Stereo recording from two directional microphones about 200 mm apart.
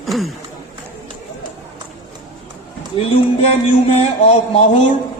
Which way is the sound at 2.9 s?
30° left (ahead or behind).